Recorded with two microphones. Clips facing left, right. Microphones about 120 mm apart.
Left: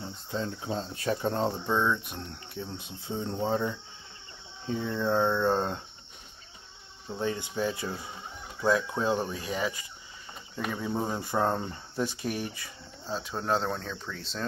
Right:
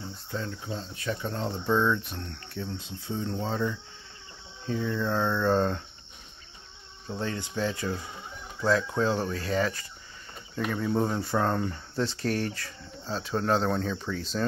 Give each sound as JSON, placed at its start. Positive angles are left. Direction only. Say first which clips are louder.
{"t": 0.3, "sound": "speech", "louder": "left 2 dB", "side_deg": 25}
{"t": 0.7, "sound": "cricket", "louder": "left 4 dB", "side_deg": 35}
{"t": 1.7, "sound": "speech", "louder": "right 2 dB", "side_deg": 10}
{"t": 2.1, "sound": "speech", "louder": "right 1 dB", "side_deg": 20}
{"t": 7.2, "sound": "speech", "louder": "left 1 dB", "side_deg": 20}
{"t": 13.1, "sound": "speech", "louder": "right 3 dB", "side_deg": 5}